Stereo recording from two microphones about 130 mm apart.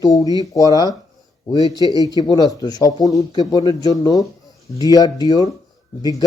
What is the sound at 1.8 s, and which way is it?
Speech, 30° right (ahead or behind).